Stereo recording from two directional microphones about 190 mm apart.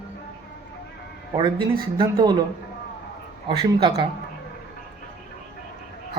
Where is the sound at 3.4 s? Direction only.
25° right (ahead or behind).